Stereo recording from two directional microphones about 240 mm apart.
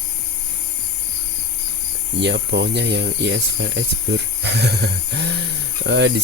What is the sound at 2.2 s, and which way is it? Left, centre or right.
Speech, right.